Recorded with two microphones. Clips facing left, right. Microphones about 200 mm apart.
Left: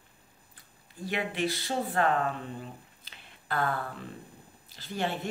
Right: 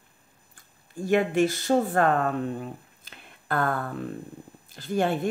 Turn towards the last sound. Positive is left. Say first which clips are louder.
# right 8 dB
turn(degrees=-50)  # may be behind; listen again after turning